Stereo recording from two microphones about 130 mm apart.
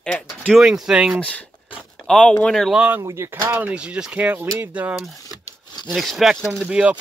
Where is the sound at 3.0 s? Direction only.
20° right (ahead or behind).